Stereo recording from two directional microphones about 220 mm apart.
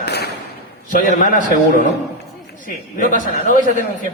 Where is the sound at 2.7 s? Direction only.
35° left (ahead or behind).